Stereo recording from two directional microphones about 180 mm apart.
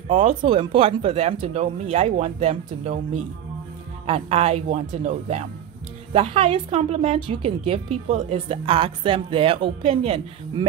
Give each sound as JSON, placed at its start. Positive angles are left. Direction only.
{"t": 0.1, "sound": "a woman's voice", "side_deg": -35}